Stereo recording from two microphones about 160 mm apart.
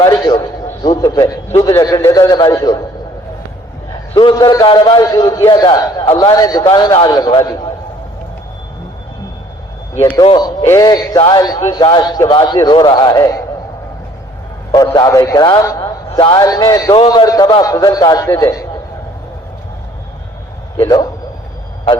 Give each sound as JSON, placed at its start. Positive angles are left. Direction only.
{"t": 0.0, "sound": "a sound", "side_deg": 25}
{"t": 0.8, "sound": "a man's voice", "side_deg": 25}
{"t": 4.1, "sound": "a man's voice", "side_deg": 30}
{"t": 10.2, "sound": "a man's voice", "side_deg": 25}
{"t": 14.9, "sound": "a man's voice", "side_deg": 25}
{"t": 16.9, "sound": "a man's voice", "side_deg": 30}
{"t": 20.8, "sound": "a man's voice", "side_deg": 25}